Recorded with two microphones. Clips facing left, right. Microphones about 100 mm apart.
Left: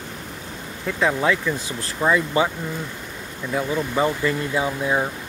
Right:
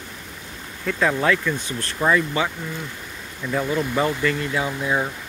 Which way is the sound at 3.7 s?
15° left (ahead or behind).